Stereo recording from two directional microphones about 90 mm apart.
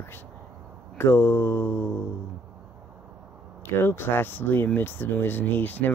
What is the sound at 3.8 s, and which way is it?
Speech, 25° left (ahead or behind).